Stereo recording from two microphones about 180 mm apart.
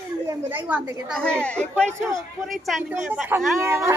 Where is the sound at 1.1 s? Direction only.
5° left (ahead or behind).